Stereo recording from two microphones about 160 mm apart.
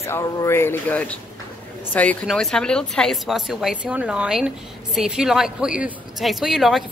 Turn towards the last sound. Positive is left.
turn(degrees=0)  # may be behind; listen again after turning